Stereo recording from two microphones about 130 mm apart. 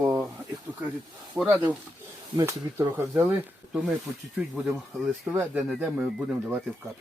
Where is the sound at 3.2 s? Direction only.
10° right (ahead or behind).